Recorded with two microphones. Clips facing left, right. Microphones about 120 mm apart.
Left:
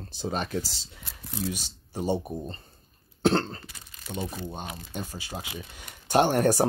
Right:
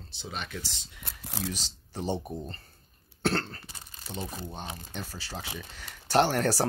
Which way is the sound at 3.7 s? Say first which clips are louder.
Right 1 dB; 30° right (ahead or behind).